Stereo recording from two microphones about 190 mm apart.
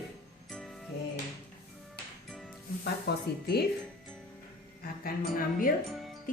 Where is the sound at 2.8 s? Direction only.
55° left (ahead or behind).